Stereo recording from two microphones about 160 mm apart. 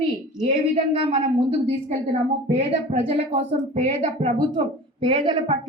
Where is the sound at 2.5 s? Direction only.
40° right (ahead or behind).